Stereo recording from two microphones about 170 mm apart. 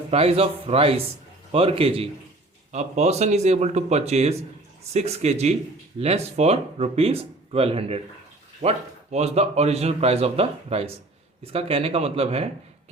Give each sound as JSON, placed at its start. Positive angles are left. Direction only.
{"t": 0.1, "sound": "a man's voice", "side_deg": -35}